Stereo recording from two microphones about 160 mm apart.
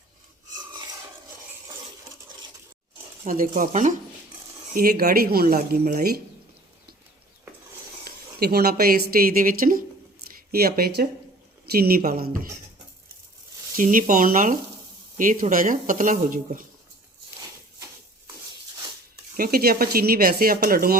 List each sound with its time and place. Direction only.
0.7 s filing: 25° right (ahead or behind)
3.2 s speech: 60° right (ahead or behind)
4.7 s speech: 70° right (ahead or behind)
8.0 s speech: 75° right (ahead or behind)
10.2 s speech: 70° right (ahead or behind)
13.7 s speech: 55° right (ahead or behind)
19.4 s speech: 70° right (ahead or behind)